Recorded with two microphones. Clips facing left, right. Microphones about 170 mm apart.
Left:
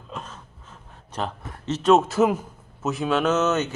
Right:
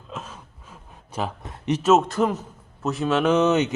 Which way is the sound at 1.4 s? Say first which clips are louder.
Right 4 dB; 15° right (ahead or behind).